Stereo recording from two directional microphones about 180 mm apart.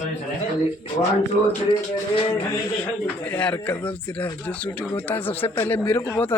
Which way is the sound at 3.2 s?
10° left (ahead or behind).